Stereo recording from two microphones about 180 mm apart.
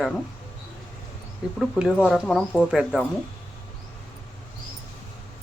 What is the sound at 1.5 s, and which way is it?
Speech, centre (ahead or behind).